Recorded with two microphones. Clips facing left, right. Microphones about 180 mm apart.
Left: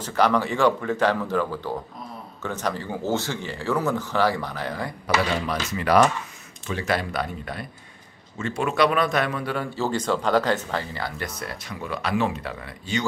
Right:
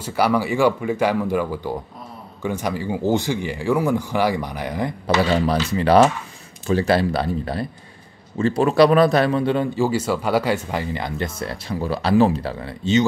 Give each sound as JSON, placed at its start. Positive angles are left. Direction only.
{"t": 0.0, "sound": "speech", "side_deg": -10}
{"t": 5.0, "sound": "a man's voice", "side_deg": -30}
{"t": 9.8, "sound": "speech", "side_deg": -10}